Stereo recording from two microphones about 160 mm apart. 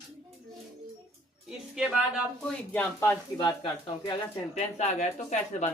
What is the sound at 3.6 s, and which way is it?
Speech, 30° left (ahead or behind).